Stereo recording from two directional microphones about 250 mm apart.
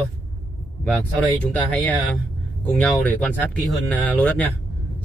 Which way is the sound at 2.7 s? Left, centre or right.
Centre.